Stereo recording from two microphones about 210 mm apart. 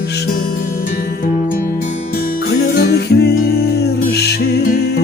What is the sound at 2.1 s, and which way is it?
Music, 45° left (ahead or behind).